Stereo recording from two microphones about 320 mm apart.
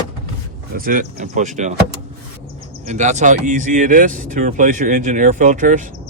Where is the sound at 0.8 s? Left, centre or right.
Right.